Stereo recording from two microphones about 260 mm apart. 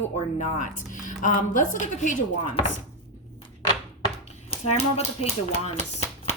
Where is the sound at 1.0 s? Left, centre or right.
Left.